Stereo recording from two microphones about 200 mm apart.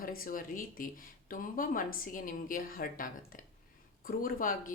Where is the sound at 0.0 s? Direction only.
45° left (ahead or behind).